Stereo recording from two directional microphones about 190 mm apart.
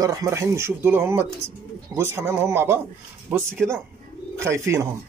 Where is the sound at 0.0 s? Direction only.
15° right (ahead or behind).